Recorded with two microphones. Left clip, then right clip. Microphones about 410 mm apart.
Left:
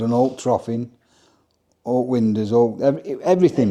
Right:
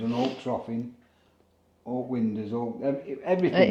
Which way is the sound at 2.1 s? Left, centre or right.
Left.